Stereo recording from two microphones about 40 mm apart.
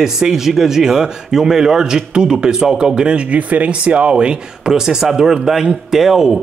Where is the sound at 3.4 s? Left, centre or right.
Right.